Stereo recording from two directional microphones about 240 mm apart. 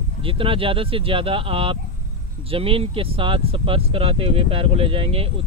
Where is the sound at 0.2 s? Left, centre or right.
Right.